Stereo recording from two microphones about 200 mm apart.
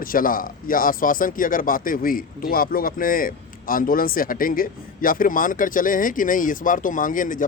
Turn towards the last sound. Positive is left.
turn(degrees=40)  # may be behind; listen again after turning